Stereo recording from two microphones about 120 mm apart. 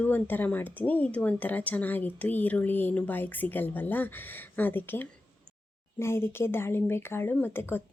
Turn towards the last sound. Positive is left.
turn(degrees=15)  # may be behind; listen again after turning